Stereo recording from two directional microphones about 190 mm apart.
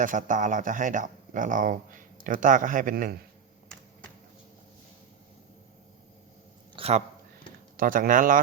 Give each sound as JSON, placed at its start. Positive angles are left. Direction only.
{"t": 0.0, "sound": "speech", "side_deg": -45}
{"t": 6.7, "sound": "a sound", "side_deg": -30}
{"t": 7.8, "sound": "speech", "side_deg": -45}